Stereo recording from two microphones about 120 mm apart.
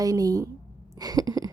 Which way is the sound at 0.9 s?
35° right (ahead or behind).